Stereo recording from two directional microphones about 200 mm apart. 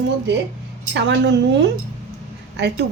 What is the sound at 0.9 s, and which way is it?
Speech, 60° right (ahead or behind).